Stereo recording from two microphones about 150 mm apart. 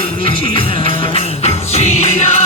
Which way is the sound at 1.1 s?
45° left (ahead or behind).